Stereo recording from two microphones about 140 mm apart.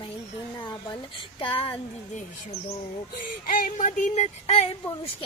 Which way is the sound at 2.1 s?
50° left (ahead or behind).